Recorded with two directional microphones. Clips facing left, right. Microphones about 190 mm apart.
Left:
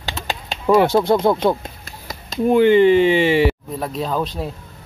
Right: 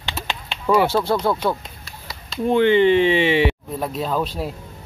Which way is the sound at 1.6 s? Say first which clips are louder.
Left 4 dB; 45° left (ahead or behind).